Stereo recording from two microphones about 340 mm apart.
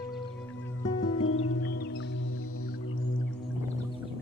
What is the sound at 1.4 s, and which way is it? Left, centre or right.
Music, left.